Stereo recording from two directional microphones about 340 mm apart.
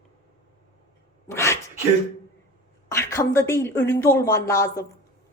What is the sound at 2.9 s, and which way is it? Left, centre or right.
A woman's voice, centre.